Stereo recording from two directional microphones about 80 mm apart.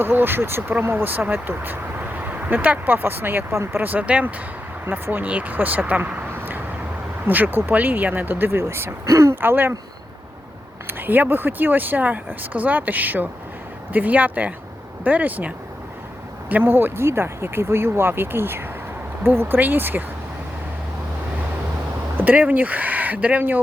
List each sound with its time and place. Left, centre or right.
0.0 s speech: right
10.8 s speech: right
22.2 s speech: right